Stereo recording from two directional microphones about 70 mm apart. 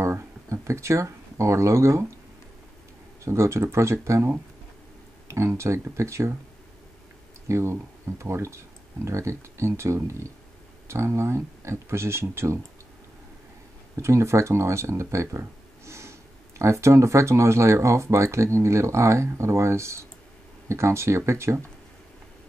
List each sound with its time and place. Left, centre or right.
0.0 s speech: right
3.3 s speech: right
7.4 s speech: right
14.0 s speech: right